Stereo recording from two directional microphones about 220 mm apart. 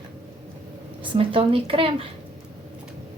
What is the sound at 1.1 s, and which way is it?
Speech, 25° right (ahead or behind).